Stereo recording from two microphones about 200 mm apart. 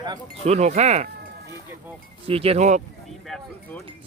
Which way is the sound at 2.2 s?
30° right (ahead or behind).